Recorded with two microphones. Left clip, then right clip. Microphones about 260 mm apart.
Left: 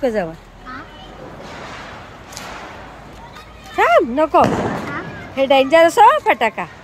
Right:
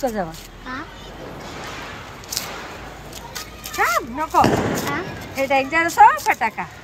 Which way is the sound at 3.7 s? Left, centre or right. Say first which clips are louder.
Left 7 dB; left.